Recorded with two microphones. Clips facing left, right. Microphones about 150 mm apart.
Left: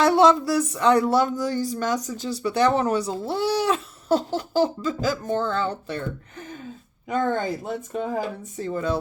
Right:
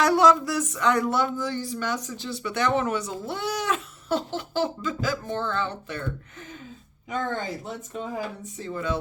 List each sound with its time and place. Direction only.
0.0 s speech: 25° left (ahead or behind)
7.9 s speech: 50° left (ahead or behind)